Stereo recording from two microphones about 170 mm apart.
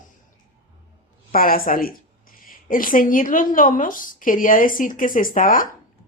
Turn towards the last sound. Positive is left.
turn(degrees=55)  # may be behind; listen again after turning